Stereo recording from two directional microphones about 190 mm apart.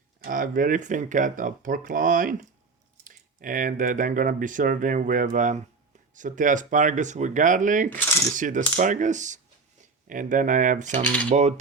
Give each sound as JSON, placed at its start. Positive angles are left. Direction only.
{"t": 0.2, "sound": "speech", "side_deg": -45}
{"t": 11.0, "sound": "cutlery", "side_deg": 5}